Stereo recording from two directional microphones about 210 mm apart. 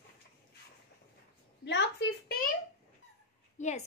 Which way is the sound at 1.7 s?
55° left (ahead or behind).